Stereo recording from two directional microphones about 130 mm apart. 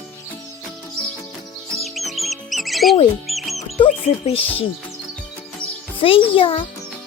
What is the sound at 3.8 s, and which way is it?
Speech, 45° left (ahead or behind).